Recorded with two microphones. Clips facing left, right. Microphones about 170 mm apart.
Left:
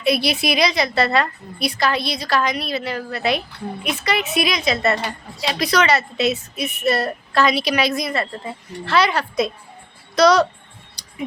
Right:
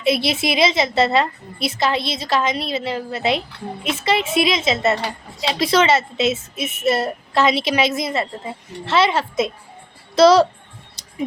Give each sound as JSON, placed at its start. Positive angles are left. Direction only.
{"t": 0.0, "sound": "a woman's voice", "side_deg": -25}
{"t": 11.0, "sound": "tick-tock", "side_deg": -25}